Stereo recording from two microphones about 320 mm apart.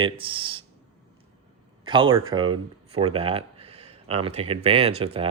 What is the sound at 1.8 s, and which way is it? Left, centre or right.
A man's voice, centre.